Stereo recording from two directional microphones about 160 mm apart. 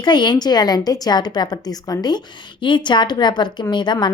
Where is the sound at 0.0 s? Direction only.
30° left (ahead or behind).